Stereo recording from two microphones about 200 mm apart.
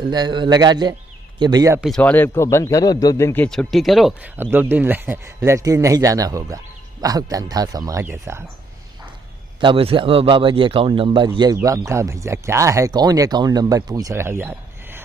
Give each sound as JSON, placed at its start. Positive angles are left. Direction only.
{"t": 0.1, "sound": "a man's voice", "side_deg": -20}
{"t": 1.8, "sound": "speech", "side_deg": 5}
{"t": 3.4, "sound": "speech", "side_deg": 0}
{"t": 9.6, "sound": "a man's voice", "side_deg": -25}